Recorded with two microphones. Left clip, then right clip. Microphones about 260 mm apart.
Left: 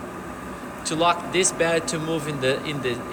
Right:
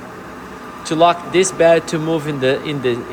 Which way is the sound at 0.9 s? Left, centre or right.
Right.